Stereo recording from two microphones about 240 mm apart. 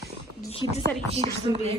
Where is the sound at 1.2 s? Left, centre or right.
Right.